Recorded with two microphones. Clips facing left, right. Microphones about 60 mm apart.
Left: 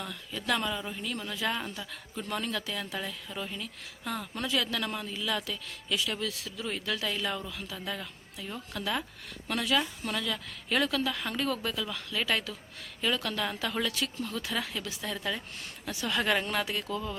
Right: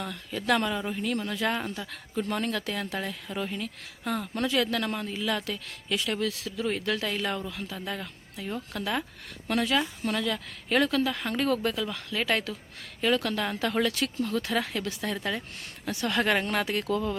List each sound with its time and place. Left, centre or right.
0.0 s speech: right
5.5 s speech: right